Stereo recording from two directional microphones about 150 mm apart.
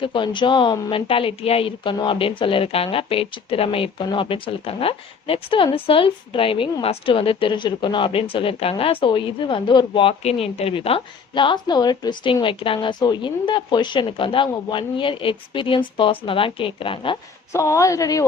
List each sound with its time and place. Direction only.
0.0 s a woman's voice: 35° left (ahead or behind)
17.5 s speech: 20° left (ahead or behind)